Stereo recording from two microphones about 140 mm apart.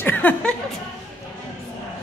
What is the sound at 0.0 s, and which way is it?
Chuckle, 10° left (ahead or behind).